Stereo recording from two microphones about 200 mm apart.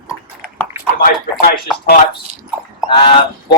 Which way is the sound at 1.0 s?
45° left (ahead or behind).